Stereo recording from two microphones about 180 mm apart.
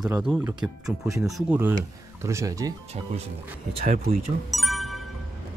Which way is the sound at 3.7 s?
35° right (ahead or behind).